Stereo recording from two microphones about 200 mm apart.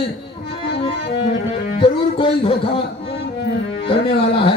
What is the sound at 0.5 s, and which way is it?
Music, 30° left (ahead or behind).